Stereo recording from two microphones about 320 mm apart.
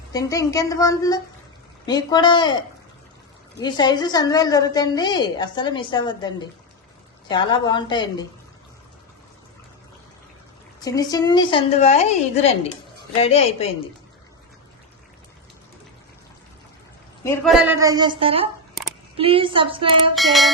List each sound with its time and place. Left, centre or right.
0.1 s a woman's voice: centre
10.8 s a woman's voice: centre
17.2 s a woman's voice: centre
20.1 s music: centre